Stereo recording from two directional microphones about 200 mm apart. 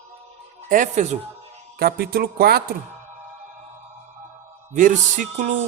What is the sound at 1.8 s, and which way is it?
Speech, 50° right (ahead or behind).